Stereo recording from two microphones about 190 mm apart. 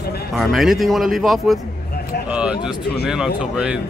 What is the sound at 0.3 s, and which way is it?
Speech, centre (ahead or behind).